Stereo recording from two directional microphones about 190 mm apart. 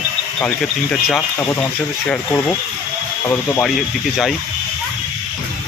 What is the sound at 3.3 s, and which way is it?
Speech, 10° left (ahead or behind).